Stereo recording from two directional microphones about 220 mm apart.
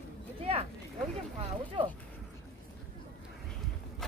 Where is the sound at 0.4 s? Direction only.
25° right (ahead or behind).